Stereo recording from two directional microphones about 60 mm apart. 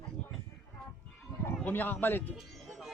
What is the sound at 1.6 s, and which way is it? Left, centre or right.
Speech, left.